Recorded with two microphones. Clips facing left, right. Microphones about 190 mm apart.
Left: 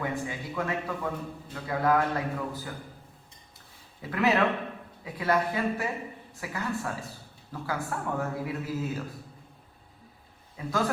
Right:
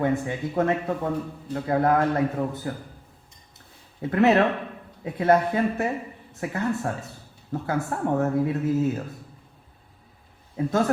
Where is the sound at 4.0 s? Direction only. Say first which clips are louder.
Right 6 dB; 25° right (ahead or behind).